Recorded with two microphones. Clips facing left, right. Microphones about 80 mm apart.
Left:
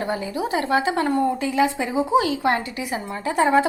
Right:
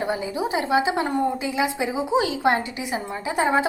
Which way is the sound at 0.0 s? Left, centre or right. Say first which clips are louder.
Even; centre.